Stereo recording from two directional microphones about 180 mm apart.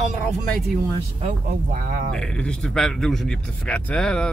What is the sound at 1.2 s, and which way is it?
Speech, 50° right (ahead or behind).